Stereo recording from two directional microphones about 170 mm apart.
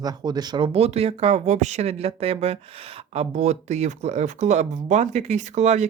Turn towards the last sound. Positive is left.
turn(degrees=-45)  # may be behind; listen again after turning